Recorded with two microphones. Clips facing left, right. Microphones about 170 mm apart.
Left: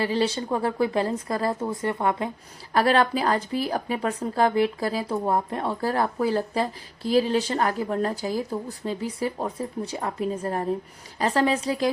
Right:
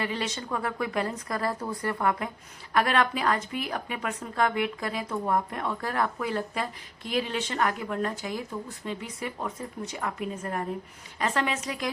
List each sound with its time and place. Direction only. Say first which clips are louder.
0.0 s speech: left 7 dB; 30° left (ahead or behind)